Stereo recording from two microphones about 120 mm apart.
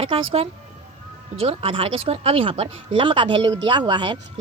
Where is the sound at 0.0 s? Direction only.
50° right (ahead or behind).